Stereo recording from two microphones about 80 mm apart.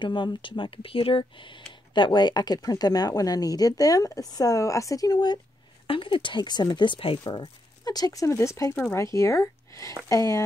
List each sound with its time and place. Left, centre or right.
0.0 s speech: left
1.7 s speech: left
5.9 s speech: left
7.8 s speech: left